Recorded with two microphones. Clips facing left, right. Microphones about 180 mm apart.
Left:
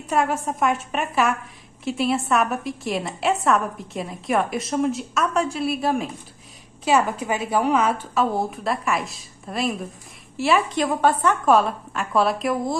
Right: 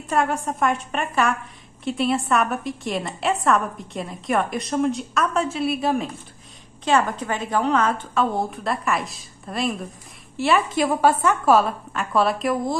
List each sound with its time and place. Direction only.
0.1 s a woman's voice: centre (ahead or behind)